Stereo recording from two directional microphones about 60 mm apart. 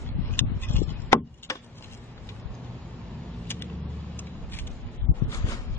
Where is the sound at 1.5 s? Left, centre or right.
Left.